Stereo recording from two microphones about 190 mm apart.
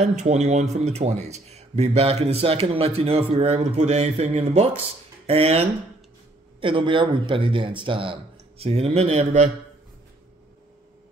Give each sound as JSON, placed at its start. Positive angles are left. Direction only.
{"t": 0.0, "sound": "a man's voice", "side_deg": -40}